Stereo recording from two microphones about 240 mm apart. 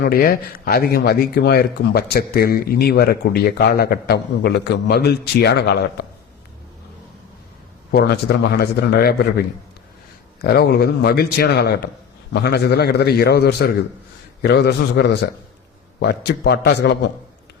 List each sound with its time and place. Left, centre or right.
0.0 s speech: left
7.9 s speech: left
10.4 s a man's voice: left